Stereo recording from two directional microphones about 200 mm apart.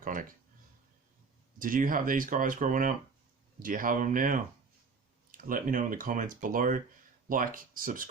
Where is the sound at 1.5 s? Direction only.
45° right (ahead or behind).